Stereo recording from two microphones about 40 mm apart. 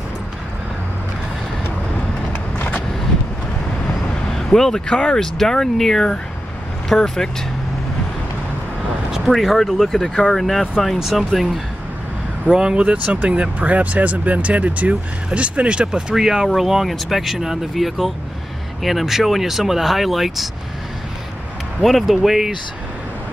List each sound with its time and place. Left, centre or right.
4.3 s speech: centre
9.3 s speech: centre
10.3 s speech: centre
12.5 s speech: right
12.9 s speech: right
16.2 s speech: centre
21.8 s speech: centre